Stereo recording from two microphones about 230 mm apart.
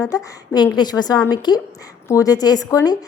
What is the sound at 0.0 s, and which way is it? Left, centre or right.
A woman's voice, centre.